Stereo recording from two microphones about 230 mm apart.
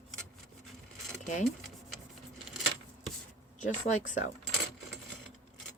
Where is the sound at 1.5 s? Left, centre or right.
Centre.